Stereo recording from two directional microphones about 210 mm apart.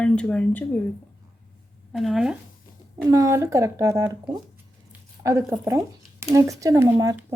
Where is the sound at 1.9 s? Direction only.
Centre (ahead or behind).